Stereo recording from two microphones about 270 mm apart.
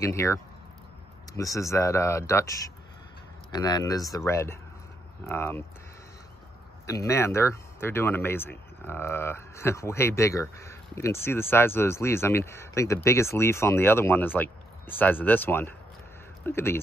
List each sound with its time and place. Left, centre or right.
0.0 s speech: centre
6.9 s speech: centre